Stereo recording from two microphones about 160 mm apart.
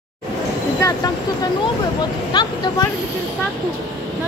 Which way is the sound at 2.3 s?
25° left (ahead or behind).